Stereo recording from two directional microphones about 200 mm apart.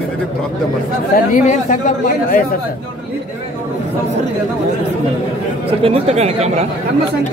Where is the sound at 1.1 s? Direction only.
40° left (ahead or behind).